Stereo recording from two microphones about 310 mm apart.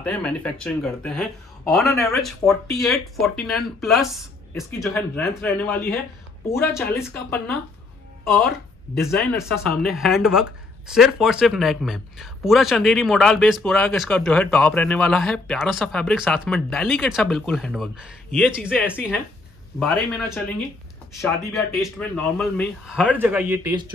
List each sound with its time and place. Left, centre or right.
0.0 s speech: centre
7.0 s speech: centre